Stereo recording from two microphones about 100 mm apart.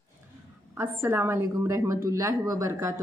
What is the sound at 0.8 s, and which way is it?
A woman's voice, 25° right (ahead or behind).